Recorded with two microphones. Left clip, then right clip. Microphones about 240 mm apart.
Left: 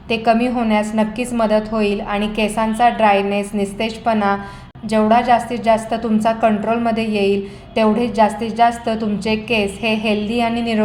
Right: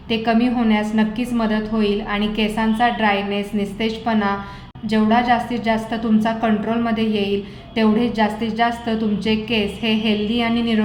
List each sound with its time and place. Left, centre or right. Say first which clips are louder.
0.1 s a woman's voice: left 3 dB; left